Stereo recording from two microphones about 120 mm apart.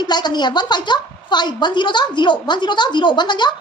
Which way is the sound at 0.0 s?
35° left (ahead or behind).